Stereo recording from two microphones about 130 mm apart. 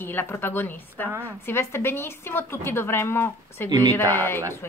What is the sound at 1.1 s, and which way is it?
Speech, 15° right (ahead or behind).